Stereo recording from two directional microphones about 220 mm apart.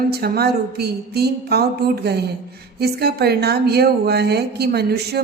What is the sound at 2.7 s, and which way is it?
A woman's voice, 45° right (ahead or behind).